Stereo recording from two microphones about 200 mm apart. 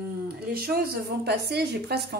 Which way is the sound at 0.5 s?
50° right (ahead or behind).